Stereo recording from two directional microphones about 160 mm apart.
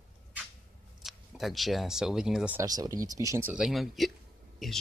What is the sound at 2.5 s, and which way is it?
Speech, 20° right (ahead or behind).